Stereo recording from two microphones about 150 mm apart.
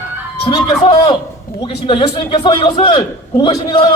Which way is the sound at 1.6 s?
45° left (ahead or behind).